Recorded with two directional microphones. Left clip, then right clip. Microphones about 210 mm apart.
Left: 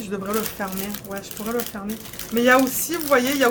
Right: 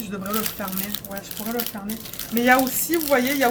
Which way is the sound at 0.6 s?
20° left (ahead or behind).